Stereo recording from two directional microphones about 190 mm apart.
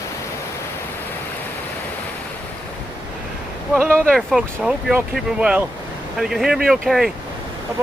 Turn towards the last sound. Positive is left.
turn(degrees=0)  # may be behind; listen again after turning